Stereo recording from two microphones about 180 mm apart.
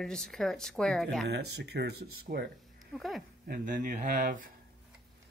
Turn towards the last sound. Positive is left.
turn(degrees=-45)  # may be behind; listen again after turning